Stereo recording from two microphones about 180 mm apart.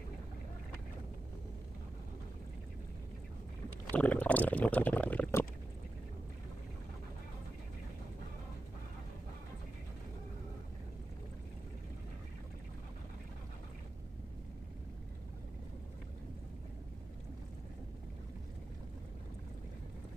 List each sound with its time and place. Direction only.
3.9 s speech: 10° left (ahead or behind)